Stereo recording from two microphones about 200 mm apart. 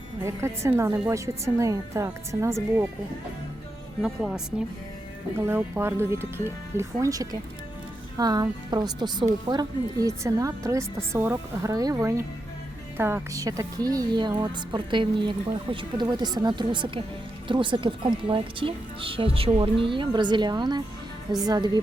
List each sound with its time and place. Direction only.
0.2 s a woman's voice: 15° right (ahead or behind)
4.0 s speech: 5° right (ahead or behind)
5.4 s a woman's voice: 10° right (ahead or behind)